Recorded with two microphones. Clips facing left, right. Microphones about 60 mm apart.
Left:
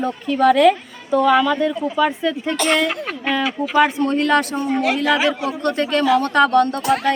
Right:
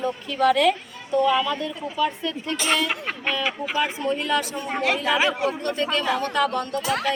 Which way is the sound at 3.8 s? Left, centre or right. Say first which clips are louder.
Left 7 dB; left.